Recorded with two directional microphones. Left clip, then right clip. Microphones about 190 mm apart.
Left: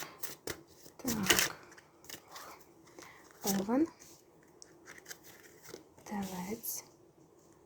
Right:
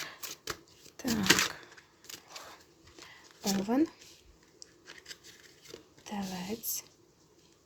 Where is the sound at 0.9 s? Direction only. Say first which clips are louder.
Right 4 dB; 30° right (ahead or behind).